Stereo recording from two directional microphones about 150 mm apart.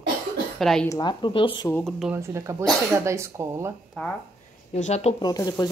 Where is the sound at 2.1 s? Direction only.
20° right (ahead or behind).